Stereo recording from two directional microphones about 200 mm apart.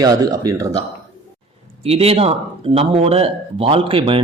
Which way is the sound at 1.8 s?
30° right (ahead or behind).